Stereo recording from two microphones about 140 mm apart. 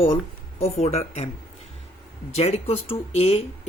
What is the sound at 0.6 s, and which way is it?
Speech, 50° left (ahead or behind).